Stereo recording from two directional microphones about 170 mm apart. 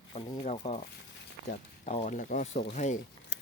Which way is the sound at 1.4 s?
45° left (ahead or behind).